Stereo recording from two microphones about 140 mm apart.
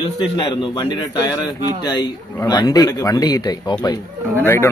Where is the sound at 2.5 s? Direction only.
30° left (ahead or behind).